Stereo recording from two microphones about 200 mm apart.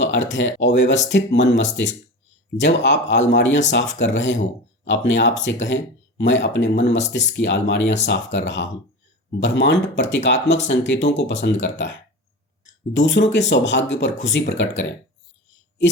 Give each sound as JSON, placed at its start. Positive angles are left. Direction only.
{"t": 0.0, "sound": "speech", "side_deg": 65}